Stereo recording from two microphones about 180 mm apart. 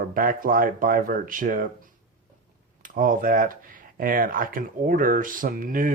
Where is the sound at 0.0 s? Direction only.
50° right (ahead or behind).